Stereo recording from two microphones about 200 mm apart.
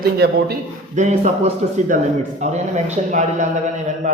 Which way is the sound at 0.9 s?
35° right (ahead or behind).